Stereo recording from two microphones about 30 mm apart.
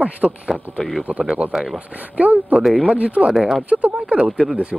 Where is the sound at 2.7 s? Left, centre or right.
Right.